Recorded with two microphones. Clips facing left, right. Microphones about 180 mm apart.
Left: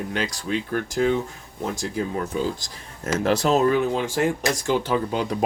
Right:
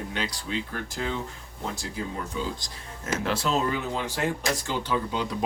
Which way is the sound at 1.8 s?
45° left (ahead or behind).